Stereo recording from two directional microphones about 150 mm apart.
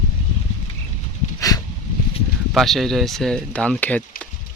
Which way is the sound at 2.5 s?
Centre (ahead or behind).